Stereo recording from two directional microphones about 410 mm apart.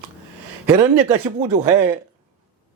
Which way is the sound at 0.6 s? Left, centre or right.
Centre.